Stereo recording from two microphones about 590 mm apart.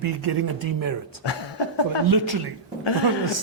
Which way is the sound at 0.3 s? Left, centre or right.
Right.